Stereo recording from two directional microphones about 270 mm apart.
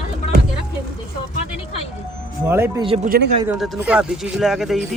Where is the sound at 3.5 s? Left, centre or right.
Centre.